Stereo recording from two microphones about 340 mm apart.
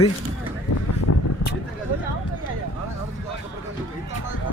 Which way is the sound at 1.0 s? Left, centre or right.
Left.